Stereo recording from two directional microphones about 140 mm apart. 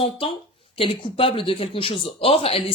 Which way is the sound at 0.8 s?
40° left (ahead or behind).